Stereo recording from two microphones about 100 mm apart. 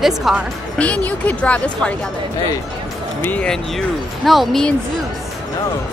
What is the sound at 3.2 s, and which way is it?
Speech, 15° left (ahead or behind).